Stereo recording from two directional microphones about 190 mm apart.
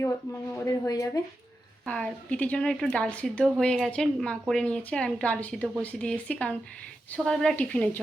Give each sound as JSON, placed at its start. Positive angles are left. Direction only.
{"t": 0.5, "sound": "a woman's voice", "side_deg": 15}
{"t": 1.8, "sound": "a woman's voice", "side_deg": 5}